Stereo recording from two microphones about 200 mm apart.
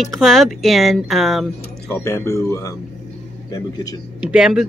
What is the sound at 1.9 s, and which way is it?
A man's voice, 15° left (ahead or behind).